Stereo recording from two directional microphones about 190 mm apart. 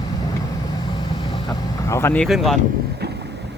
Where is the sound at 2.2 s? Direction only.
Centre (ahead or behind).